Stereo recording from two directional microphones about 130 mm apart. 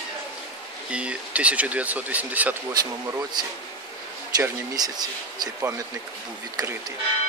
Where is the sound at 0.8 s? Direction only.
10° right (ahead or behind).